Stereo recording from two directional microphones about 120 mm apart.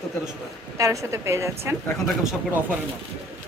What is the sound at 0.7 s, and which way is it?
A woman's voice, 25° right (ahead or behind).